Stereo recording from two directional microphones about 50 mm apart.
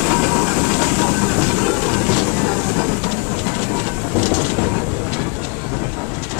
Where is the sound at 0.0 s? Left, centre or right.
Centre.